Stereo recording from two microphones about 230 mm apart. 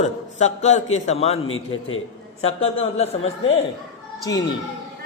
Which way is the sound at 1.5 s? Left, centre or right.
Left.